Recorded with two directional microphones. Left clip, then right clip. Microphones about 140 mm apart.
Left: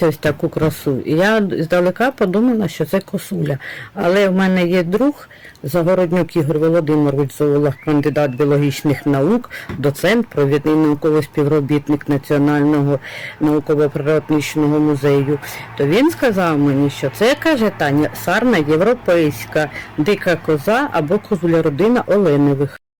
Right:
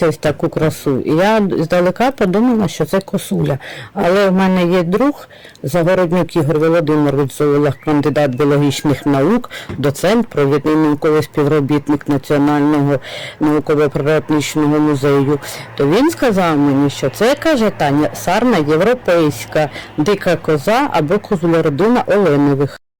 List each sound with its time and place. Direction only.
0.0 s speech: 10° right (ahead or behind)